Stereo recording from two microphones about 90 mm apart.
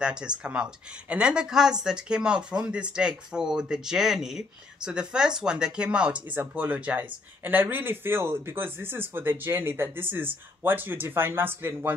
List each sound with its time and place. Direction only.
0.0 s a woman's voice: 10° right (ahead or behind)